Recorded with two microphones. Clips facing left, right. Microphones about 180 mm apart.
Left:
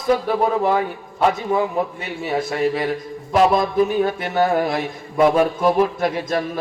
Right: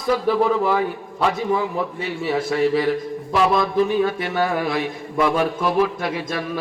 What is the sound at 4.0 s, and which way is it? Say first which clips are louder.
A man's voice: left 2 dB; 45° left (ahead or behind).